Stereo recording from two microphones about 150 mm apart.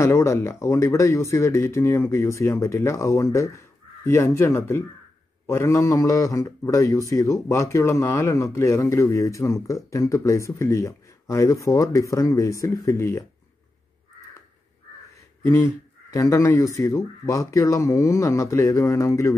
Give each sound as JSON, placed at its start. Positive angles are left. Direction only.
{"t": 0.0, "sound": "speech", "side_deg": 20}
{"t": 15.1, "sound": "speech", "side_deg": 20}